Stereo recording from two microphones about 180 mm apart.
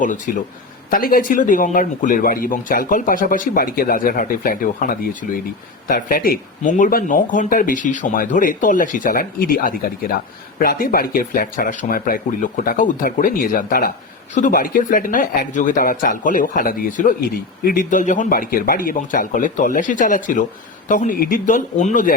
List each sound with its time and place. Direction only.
0.3 s speech: 50° left (ahead or behind)